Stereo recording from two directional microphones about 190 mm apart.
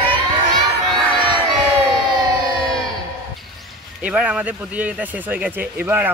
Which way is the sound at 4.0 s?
5° right (ahead or behind).